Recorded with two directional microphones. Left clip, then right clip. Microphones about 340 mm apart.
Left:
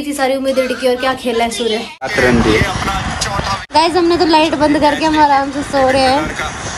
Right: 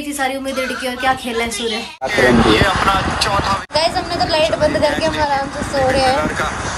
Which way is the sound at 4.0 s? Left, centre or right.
Centre.